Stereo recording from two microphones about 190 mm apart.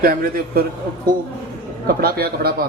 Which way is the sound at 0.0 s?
50° right (ahead or behind).